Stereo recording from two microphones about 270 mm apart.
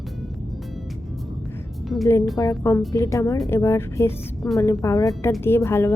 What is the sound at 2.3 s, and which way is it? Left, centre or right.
Speech, centre.